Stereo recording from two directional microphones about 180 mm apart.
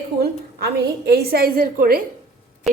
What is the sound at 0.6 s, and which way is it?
A woman's voice, 60° right (ahead or behind).